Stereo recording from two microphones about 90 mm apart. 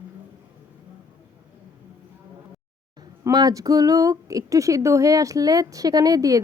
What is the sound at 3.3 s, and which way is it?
Speech, 45° right (ahead or behind).